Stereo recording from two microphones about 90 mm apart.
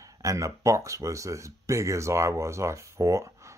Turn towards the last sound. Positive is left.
turn(degrees=-35)  # may be behind; listen again after turning